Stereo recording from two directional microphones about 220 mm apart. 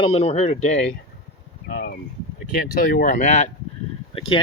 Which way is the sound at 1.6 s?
45° left (ahead or behind).